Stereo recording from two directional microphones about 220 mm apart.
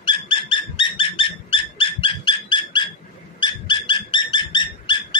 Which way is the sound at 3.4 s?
20° left (ahead or behind).